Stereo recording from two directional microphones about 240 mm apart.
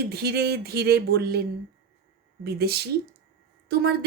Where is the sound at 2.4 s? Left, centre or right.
Right.